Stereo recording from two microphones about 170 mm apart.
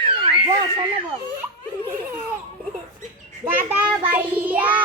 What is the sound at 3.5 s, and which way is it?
Child singing, 10° right (ahead or behind).